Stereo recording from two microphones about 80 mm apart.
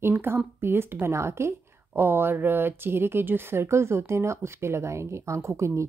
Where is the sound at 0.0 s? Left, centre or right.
Right.